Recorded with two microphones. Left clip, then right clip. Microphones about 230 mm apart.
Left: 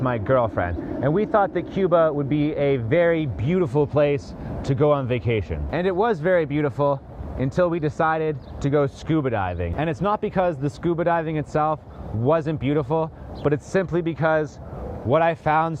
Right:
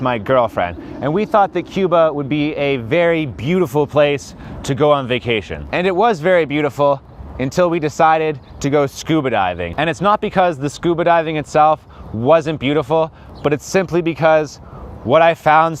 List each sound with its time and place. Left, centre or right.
0.0 s speech: right